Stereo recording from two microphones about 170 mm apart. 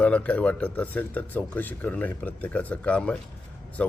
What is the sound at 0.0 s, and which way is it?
Speech, 10° left (ahead or behind).